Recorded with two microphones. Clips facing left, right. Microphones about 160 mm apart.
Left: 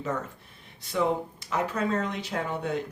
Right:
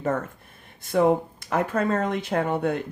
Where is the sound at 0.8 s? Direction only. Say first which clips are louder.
Right 6 dB; 50° right (ahead or behind).